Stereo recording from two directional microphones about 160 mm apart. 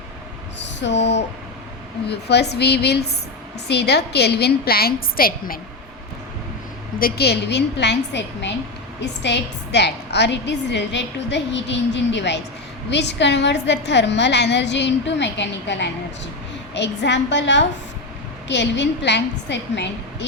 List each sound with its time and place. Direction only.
0.6 s a sound: 90° left
2.0 s a woman's voice: 90° left; by 5.5 s 65° left (ahead or behind)
7.0 s a woman's voice: 85° left